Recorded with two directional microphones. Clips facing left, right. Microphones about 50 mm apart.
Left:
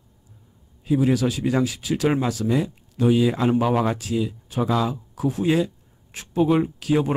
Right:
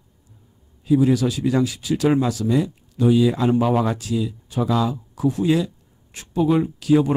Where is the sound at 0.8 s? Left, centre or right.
Left.